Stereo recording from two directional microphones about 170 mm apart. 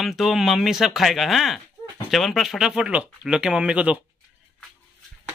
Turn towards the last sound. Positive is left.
turn(degrees=-5)  # may be behind; listen again after turning